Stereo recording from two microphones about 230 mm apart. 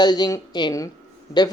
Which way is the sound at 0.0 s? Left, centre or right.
Centre.